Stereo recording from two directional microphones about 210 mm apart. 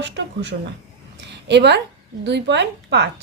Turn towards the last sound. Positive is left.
turn(degrees=-55)  # may be behind; listen again after turning